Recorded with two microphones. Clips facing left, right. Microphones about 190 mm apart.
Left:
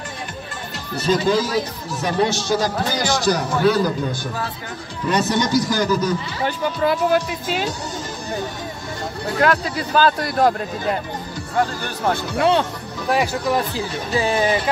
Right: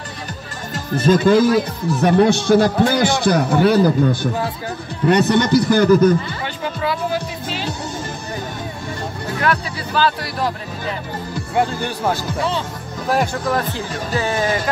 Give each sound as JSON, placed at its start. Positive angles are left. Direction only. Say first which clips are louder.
{"t": 0.9, "sound": "a man's voice", "louder": "right 5 dB", "side_deg": -50}
{"t": 6.4, "sound": "speech", "louder": "left 3 dB", "side_deg": 50}
{"t": 9.9, "sound": "speech", "louder": "left 2 dB", "side_deg": 45}
{"t": 11.5, "sound": "speech", "louder": "right 2 dB", "side_deg": -15}
{"t": 12.4, "sound": "speech", "louder": "left 5 dB", "side_deg": 60}
{"t": 13.1, "sound": "speech", "louder": "even", "side_deg": 5}